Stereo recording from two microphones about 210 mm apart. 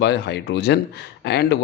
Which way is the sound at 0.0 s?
55° left (ahead or behind).